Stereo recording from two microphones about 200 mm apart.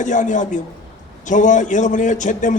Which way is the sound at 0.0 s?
40° left (ahead or behind).